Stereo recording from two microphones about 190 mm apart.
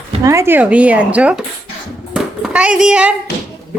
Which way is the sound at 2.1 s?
5° right (ahead or behind).